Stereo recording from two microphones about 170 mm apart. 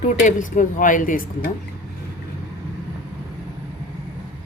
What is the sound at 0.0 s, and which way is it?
Speech, 45° left (ahead or behind).